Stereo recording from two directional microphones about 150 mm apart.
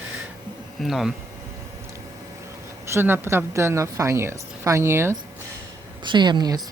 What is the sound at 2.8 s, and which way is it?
Speech, 15° right (ahead or behind).